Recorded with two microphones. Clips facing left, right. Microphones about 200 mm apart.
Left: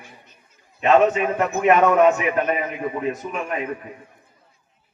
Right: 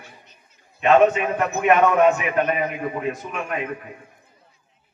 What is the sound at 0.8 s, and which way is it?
A man's voice, 30° left (ahead or behind).